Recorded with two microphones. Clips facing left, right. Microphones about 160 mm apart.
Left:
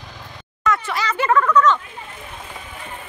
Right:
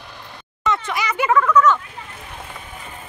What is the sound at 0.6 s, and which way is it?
Speech, 15° right (ahead or behind).